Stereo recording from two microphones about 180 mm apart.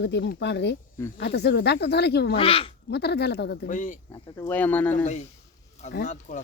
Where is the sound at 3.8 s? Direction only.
45° left (ahead or behind).